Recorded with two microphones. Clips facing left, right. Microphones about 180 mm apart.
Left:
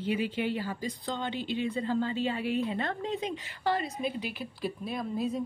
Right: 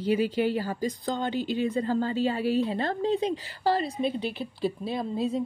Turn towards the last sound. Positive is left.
turn(degrees=-30)  # may be behind; listen again after turning